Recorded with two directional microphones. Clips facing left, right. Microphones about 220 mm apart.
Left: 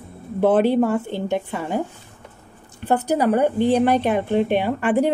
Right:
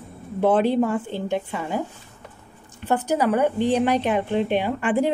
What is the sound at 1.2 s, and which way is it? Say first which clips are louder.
Speech: left 2 dB; 45° left (ahead or behind).